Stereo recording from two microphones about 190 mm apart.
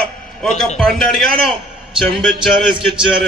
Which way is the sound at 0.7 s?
5° left (ahead or behind).